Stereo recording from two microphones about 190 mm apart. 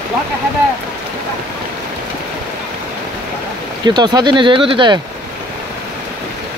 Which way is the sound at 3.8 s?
25° right (ahead or behind).